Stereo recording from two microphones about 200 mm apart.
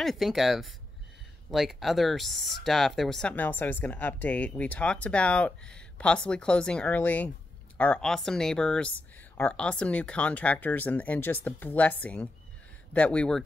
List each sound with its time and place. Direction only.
0.0 s speech: centre (ahead or behind)